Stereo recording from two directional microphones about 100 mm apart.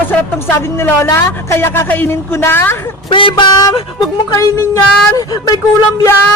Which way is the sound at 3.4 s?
45° left (ahead or behind).